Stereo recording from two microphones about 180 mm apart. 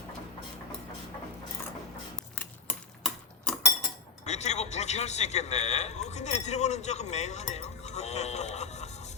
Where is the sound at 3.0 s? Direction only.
Centre (ahead or behind).